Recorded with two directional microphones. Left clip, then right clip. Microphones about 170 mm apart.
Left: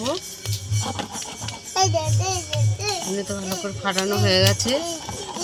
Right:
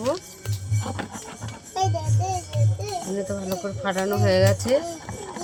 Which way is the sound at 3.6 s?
10° right (ahead or behind).